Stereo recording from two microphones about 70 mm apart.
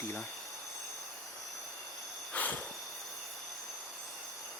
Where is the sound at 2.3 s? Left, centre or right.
Left.